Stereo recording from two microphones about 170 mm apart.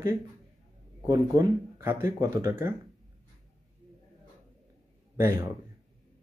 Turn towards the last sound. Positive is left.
turn(degrees=-15)  # may be behind; listen again after turning